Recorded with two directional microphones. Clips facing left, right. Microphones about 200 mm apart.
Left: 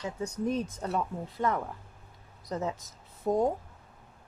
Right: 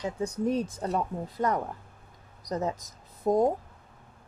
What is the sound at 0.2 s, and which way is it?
A woman's voice, 30° right (ahead or behind).